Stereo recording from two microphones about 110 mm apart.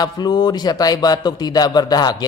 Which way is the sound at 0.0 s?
40° left (ahead or behind).